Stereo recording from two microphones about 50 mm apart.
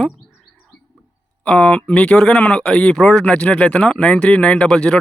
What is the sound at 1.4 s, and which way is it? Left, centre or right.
Speech, left.